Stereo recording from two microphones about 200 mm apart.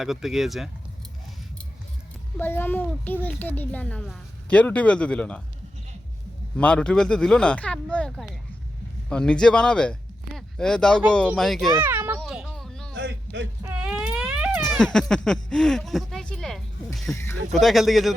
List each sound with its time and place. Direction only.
0.0 s speech: centre (ahead or behind)
2.4 s a child's voice: 10° left (ahead or behind)
6.6 s speech: 5° left (ahead or behind)
11.7 s meow: 10° right (ahead or behind)
13.0 s a sound: 60° right (ahead or behind)
13.7 s a sound: 5° right (ahead or behind)
17.5 s speech: centre (ahead or behind)